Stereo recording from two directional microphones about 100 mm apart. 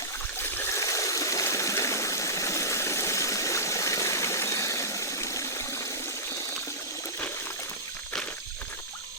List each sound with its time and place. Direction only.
0.7 s water: 30° left (ahead or behind)